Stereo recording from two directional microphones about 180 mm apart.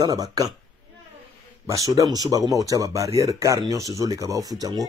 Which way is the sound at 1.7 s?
20° right (ahead or behind).